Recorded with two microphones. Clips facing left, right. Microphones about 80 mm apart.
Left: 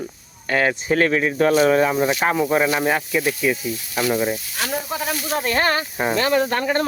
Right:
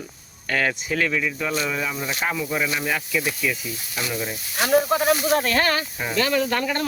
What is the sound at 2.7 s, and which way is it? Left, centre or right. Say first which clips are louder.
Speech: left 5 dB; left.